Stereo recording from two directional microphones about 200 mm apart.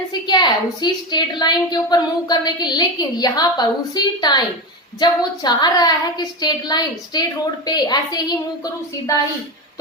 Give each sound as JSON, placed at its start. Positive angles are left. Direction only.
{"t": 0.1, "sound": "a woman's voice", "side_deg": 20}